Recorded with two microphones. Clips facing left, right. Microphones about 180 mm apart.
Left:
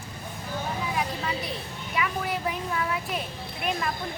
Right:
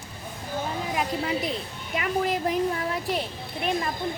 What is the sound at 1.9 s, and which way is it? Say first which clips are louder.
A woman's voice: right 4 dB; 45° right (ahead or behind).